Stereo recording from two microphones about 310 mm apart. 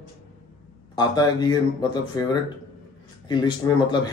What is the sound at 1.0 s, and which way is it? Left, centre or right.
A man's voice, centre.